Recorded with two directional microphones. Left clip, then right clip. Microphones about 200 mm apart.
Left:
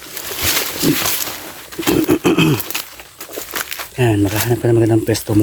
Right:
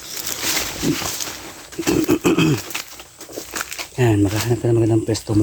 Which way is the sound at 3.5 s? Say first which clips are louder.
Left 3 dB; 10° left (ahead or behind).